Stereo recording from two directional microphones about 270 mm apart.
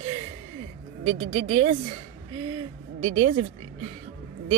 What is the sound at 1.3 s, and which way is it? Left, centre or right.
Speech, right.